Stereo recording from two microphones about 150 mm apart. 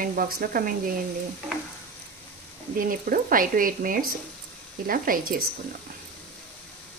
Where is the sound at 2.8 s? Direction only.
70° right (ahead or behind).